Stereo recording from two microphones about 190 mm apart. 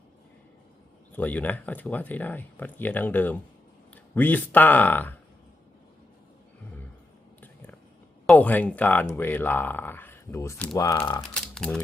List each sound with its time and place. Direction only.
1.1 s speech: 10° left (ahead or behind)
8.3 s speech: 10° left (ahead or behind)
11.2 s speech: 5° left (ahead or behind)